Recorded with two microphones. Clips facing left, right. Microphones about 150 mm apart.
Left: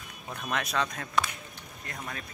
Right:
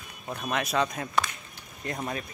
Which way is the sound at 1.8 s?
25° right (ahead or behind).